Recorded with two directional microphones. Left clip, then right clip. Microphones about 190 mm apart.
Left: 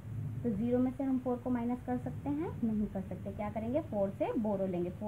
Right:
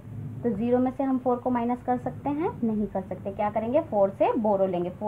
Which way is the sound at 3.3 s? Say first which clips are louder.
Right 11 dB; 20° right (ahead or behind).